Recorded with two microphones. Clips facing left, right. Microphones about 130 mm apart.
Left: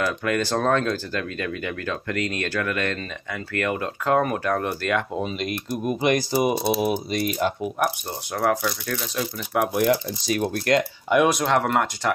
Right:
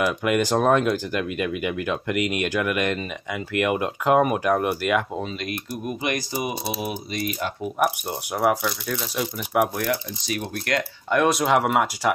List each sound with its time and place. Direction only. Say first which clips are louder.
0.0 s speech: right 2 dB; 15° right (ahead or behind)
5.9 s speech: left 6 dB; 30° left (ahead or behind)
7.8 s speech: right 4 dB; 10° right (ahead or behind)
9.8 s speech: left 5 dB; 30° left (ahead or behind)
10.8 s speech: right 2 dB; 10° left (ahead or behind)
11.3 s speech: right 1 dB; 5° right (ahead or behind)